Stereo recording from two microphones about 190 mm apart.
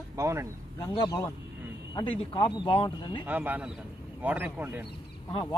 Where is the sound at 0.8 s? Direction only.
20° left (ahead or behind).